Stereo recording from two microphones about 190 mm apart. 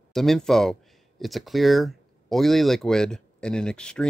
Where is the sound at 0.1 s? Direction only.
Centre (ahead or behind).